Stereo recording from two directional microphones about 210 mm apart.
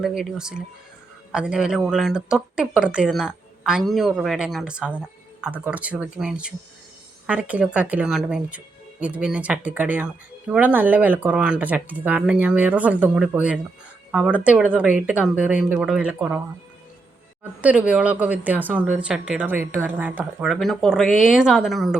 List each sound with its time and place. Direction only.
0.0 s speech: centre (ahead or behind)
17.6 s speech: 5° right (ahead or behind)